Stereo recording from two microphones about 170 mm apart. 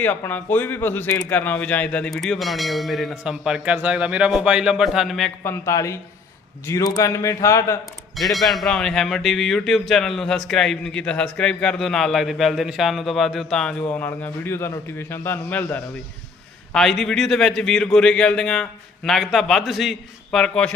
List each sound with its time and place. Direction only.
0.0 s a man's voice: 10° left (ahead or behind)
5.4 s a man's voice: 15° left (ahead or behind)
8.1 s speech: centre (ahead or behind)